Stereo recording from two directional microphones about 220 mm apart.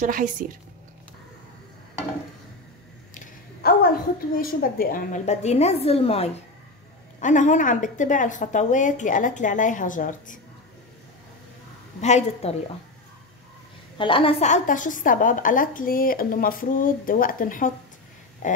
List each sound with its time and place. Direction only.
0.0 s a woman's voice: 35° right (ahead or behind)
3.2 s a sound: 40° left (ahead or behind)
4.4 s a woman's voice: 40° left (ahead or behind)
12.0 s a woman's voice: 30° left (ahead or behind)
13.9 s a woman's voice: 25° left (ahead or behind)
18.4 s a sound: 35° left (ahead or behind)